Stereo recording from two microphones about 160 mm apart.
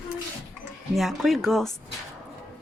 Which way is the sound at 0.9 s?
Centre (ahead or behind).